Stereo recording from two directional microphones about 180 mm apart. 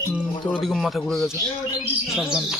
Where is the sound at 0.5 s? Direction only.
Centre (ahead or behind).